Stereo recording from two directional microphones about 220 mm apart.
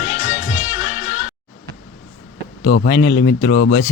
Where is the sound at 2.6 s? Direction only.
45° left (ahead or behind).